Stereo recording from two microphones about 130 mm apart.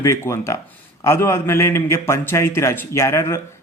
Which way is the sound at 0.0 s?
20° left (ahead or behind).